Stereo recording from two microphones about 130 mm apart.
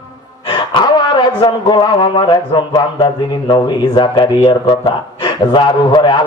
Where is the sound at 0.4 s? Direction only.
35° left (ahead or behind).